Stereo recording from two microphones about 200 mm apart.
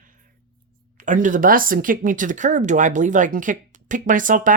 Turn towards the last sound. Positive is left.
turn(degrees=-40)  # may be behind; listen again after turning